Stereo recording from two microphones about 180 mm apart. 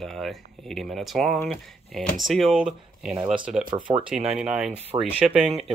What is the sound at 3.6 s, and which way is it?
Speech, 25° right (ahead or behind).